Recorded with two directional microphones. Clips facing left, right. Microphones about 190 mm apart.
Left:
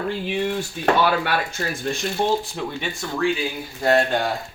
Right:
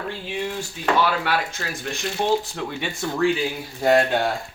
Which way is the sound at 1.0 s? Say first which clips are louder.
Left 2 dB; 55° left (ahead or behind).